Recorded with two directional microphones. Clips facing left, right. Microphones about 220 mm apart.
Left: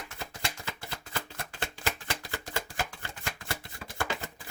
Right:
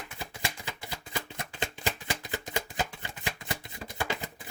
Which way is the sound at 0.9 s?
15° right (ahead or behind).